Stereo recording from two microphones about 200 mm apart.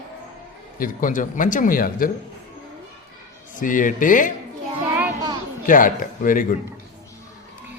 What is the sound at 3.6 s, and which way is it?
Speech, 40° left (ahead or behind).